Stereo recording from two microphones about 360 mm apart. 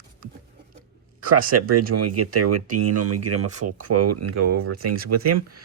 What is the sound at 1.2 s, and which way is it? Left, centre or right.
Speech, right.